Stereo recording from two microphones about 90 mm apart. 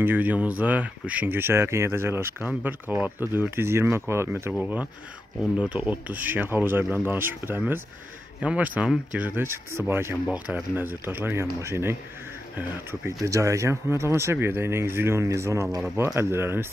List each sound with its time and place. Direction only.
0.0 s speech: 20° right (ahead or behind)
4.6 s speech: 15° right (ahead or behind)
8.4 s speech: 15° right (ahead or behind)
10.3 s speech: 15° right (ahead or behind)
10.9 s speech: 25° right (ahead or behind)
13.2 s speech: 35° right (ahead or behind)